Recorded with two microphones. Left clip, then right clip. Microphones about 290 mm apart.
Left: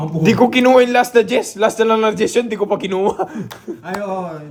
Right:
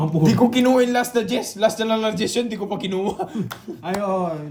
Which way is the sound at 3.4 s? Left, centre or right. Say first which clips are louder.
Left 1 dB; centre.